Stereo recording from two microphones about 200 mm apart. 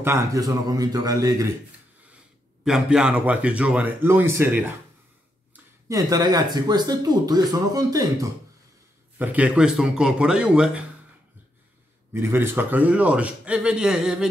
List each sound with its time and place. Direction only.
0.0 s a man's voice: 15° right (ahead or behind)
2.6 s a man's voice: 5° right (ahead or behind)
9.2 s speech: 5° right (ahead or behind)
12.1 s a man's voice: 10° right (ahead or behind)